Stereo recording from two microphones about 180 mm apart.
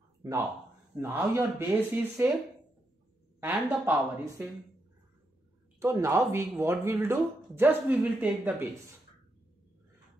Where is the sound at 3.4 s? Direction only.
10° right (ahead or behind).